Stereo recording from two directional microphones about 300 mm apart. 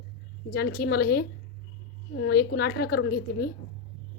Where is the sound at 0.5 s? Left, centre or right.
Left.